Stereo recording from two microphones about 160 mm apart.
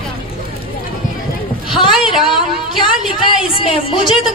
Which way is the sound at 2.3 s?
30° left (ahead or behind).